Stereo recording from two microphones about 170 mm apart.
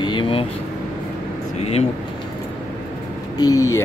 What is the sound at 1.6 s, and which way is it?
Speech, 35° left (ahead or behind).